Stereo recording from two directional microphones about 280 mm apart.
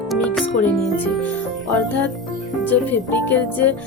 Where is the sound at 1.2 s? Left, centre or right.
Centre.